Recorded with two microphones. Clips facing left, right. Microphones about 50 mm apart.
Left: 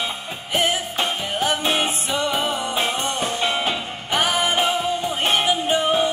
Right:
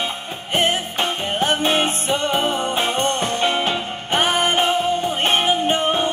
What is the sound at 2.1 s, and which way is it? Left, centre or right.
Music, right.